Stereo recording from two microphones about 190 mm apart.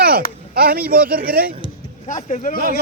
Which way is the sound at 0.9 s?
50° right (ahead or behind).